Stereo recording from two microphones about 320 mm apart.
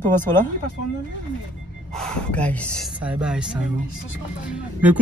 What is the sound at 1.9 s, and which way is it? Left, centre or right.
Speech, centre.